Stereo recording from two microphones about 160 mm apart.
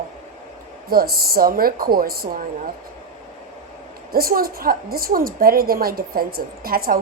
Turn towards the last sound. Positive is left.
turn(degrees=-65)  # may be behind; listen again after turning